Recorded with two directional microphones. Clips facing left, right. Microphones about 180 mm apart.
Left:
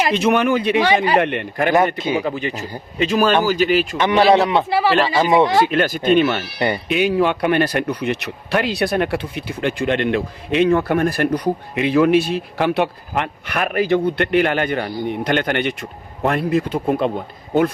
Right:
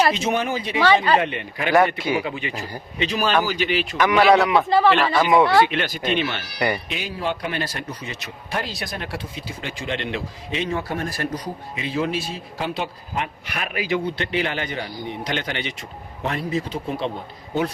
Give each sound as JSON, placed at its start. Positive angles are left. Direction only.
{"t": 0.1, "sound": "speech", "side_deg": 60}
{"t": 2.0, "sound": "speech", "side_deg": 20}
{"t": 2.2, "sound": "a man's voice", "side_deg": 40}
{"t": 3.9, "sound": "a man's voice", "side_deg": 30}
{"t": 4.5, "sound": "speech", "side_deg": 5}
{"t": 5.4, "sound": "speech", "side_deg": 20}
{"t": 5.6, "sound": "speech", "side_deg": 45}
{"t": 6.8, "sound": "speech", "side_deg": 65}